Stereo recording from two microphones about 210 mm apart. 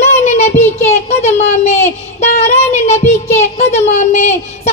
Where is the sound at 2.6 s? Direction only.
30° left (ahead or behind).